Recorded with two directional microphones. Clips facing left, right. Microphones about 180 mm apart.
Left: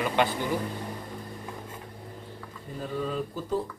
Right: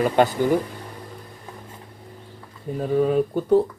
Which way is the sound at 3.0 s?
60° right (ahead or behind).